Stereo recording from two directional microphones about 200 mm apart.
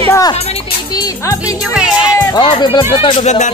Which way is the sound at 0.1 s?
20° left (ahead or behind).